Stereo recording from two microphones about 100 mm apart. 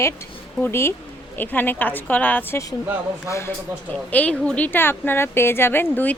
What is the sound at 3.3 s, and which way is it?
Speech, 30° left (ahead or behind).